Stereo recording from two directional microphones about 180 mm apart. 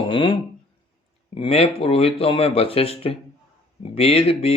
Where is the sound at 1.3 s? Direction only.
35° left (ahead or behind).